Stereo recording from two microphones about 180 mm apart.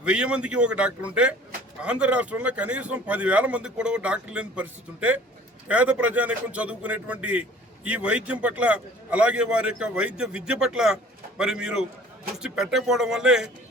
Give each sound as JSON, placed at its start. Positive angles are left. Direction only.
{"t": 0.0, "sound": "a man's voice", "side_deg": -5}